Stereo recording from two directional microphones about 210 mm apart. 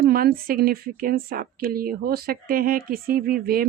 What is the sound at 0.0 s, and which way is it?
Speech, 45° right (ahead or behind).